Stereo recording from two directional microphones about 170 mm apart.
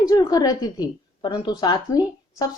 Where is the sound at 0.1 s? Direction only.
20° left (ahead or behind).